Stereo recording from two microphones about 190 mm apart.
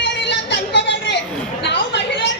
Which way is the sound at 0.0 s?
65° left (ahead or behind).